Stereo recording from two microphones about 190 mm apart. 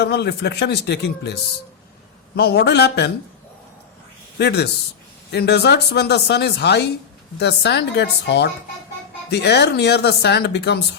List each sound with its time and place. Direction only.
0.0 s speech: 60° left (ahead or behind)
4.4 s speech: 60° left (ahead or behind)